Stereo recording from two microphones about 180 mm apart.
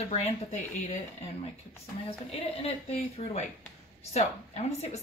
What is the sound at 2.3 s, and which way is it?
Speech, 35° left (ahead or behind).